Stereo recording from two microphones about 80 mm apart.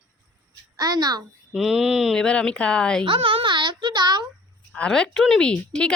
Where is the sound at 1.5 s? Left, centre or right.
Centre.